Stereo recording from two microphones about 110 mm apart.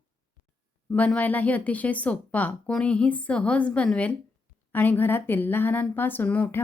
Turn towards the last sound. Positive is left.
turn(degrees=15)  # may be behind; listen again after turning